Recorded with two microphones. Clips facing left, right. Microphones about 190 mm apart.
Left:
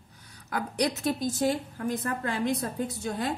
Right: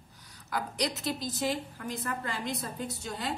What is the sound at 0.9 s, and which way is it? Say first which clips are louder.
A woman's voice: left 6 dB; 50° left (ahead or behind).